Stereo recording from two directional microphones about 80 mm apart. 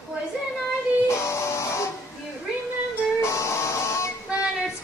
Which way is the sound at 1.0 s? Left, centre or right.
Left.